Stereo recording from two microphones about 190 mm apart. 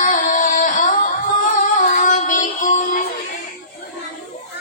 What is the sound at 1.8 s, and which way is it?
Music, 45° left (ahead or behind).